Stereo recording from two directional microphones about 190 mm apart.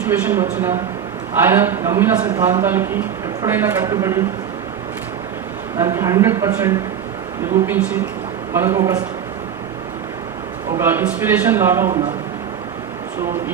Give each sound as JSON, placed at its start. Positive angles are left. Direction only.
{"t": 0.1, "sound": "speech", "side_deg": -10}
{"t": 5.7, "sound": "speech", "side_deg": -15}
{"t": 10.8, "sound": "speech", "side_deg": -10}